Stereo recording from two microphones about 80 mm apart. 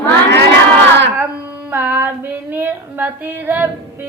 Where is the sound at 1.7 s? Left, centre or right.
Right.